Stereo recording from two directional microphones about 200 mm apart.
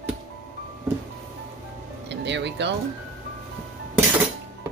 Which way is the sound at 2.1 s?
60° right (ahead or behind).